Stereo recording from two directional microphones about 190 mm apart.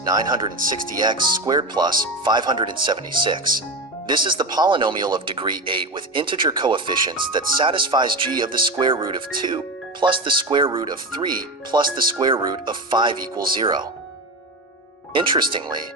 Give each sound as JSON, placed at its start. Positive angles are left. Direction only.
{"t": 0.1, "sound": "speech", "side_deg": -20}
{"t": 15.1, "sound": "speech", "side_deg": -25}